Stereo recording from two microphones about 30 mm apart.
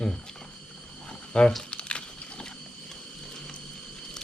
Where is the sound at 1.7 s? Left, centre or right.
Left.